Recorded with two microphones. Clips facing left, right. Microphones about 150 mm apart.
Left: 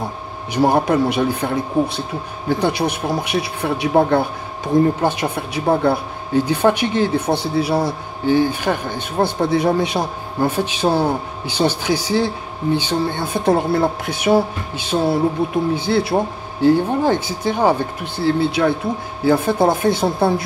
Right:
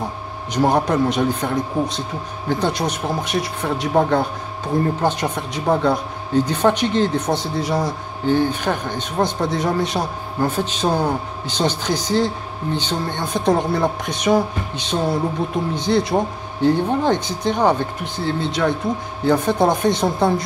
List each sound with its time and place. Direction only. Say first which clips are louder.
0.5 s speech: left 2 dB; 10° left (ahead or behind)